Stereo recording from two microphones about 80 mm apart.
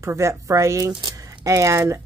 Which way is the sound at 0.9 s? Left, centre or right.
Right.